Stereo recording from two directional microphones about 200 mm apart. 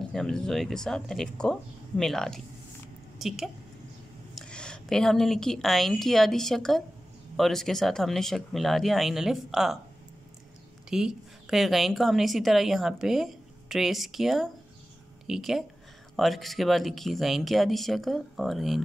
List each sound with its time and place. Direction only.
0.1 s a woman's voice: centre (ahead or behind)
10.9 s a woman's voice: 5° right (ahead or behind)